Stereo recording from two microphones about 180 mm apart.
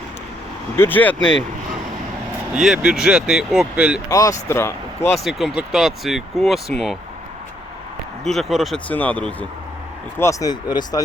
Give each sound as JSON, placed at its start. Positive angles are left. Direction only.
{"t": 0.8, "sound": "speech", "side_deg": 10}
{"t": 1.2, "sound": "speech", "side_deg": 90}
{"t": 2.5, "sound": "speech", "side_deg": -5}
{"t": 4.1, "sound": "speech", "side_deg": 20}
{"t": 5.1, "sound": "speech", "side_deg": 0}
{"t": 8.2, "sound": "speech", "side_deg": 0}